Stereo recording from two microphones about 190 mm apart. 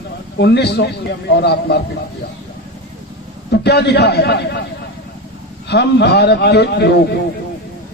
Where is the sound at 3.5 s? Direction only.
60° left (ahead or behind).